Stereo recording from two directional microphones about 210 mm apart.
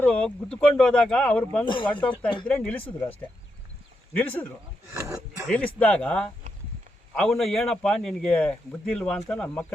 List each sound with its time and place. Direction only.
0.0 s a man's voice: 5° left (ahead or behind)
1.6 s speech: 25° left (ahead or behind)
1.9 s speech: 5° left (ahead or behind)
5.0 s speech: 15° right (ahead or behind)
5.5 s a man's voice: 5° left (ahead or behind)